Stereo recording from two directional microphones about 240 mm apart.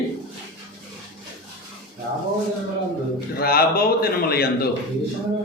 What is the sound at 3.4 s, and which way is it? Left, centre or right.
A man's voice, left.